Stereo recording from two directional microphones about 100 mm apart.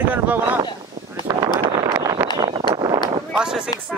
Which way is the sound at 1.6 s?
55° right (ahead or behind).